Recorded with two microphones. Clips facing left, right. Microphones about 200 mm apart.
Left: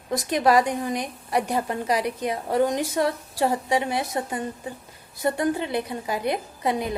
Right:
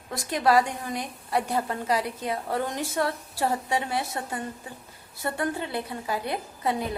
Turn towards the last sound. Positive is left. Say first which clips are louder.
# left 3 dB
turn(degrees=15)  # may be behind; listen again after turning